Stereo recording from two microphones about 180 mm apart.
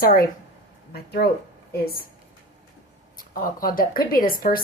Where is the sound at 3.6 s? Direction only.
50° left (ahead or behind).